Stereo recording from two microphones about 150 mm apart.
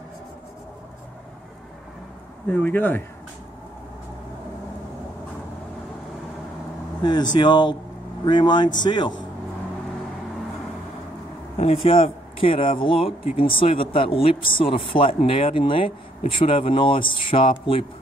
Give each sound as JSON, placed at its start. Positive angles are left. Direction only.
{"t": 2.4, "sound": "speech", "side_deg": 10}
{"t": 7.0, "sound": "speech", "side_deg": 30}
{"t": 11.5, "sound": "speech", "side_deg": 40}